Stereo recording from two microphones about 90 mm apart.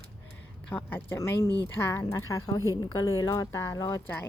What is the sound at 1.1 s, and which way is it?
Speech, 35° left (ahead or behind).